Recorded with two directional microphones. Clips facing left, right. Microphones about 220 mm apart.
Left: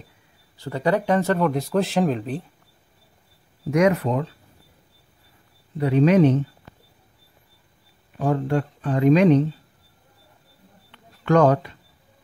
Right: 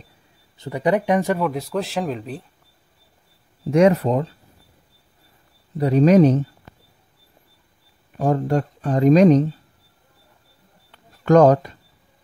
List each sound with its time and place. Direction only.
0.6 s speech: 15° right (ahead or behind)
1.4 s speech: centre (ahead or behind)
3.7 s speech: 30° right (ahead or behind)
5.8 s speech: 40° right (ahead or behind)
8.2 s speech: 40° right (ahead or behind)
10.9 s a sound: 40° right (ahead or behind)